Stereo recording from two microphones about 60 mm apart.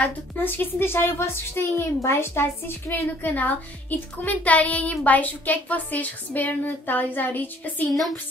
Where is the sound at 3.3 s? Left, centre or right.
Left.